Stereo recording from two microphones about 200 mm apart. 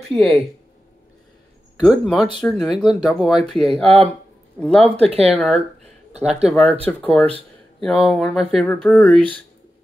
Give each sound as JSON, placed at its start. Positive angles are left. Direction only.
{"t": 0.1, "sound": "speech", "side_deg": 0}
{"t": 1.8, "sound": "speech", "side_deg": 0}
{"t": 3.8, "sound": "speech", "side_deg": -30}
{"t": 4.6, "sound": "speech", "side_deg": 5}
{"t": 5.0, "sound": "speech", "side_deg": -30}
{"t": 5.3, "sound": "speech", "side_deg": 0}